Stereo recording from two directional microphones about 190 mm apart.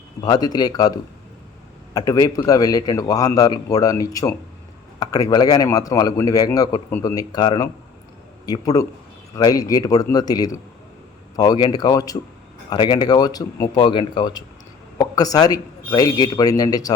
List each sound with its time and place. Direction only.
0.2 s a man's voice: 20° left (ahead or behind)